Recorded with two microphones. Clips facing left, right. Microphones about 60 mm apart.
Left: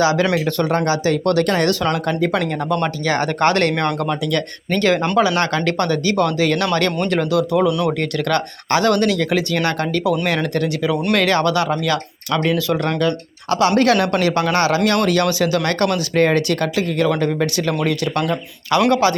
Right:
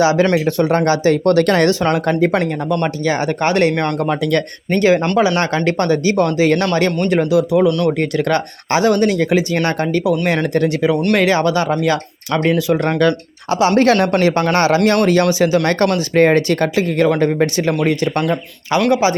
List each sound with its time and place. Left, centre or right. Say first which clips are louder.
0.0 s speech: right 3 dB; right
0.9 s speech: right 4 dB; right
3.0 s speech: even; centre
4.1 s speech: right 4 dB; right
4.7 s speech: right 3 dB; centre
7.7 s speech: right 3 dB; centre
7.9 s speech: right 3 dB; right
15.6 s speech: right 3 dB; right
18.9 s speech: right 2 dB; centre